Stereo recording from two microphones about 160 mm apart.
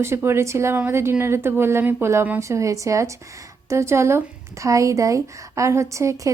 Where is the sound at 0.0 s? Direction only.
15° right (ahead or behind).